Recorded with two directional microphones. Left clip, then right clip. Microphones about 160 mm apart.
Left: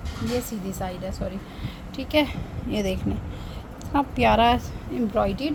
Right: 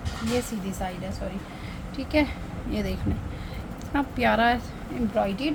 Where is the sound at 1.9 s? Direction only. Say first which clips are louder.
Left 2 dB; 50° left (ahead or behind).